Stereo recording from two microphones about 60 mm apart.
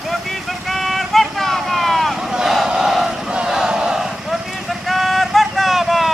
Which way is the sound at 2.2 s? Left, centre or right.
Centre.